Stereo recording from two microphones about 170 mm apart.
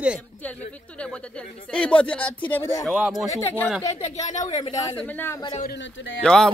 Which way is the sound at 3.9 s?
40° left (ahead or behind).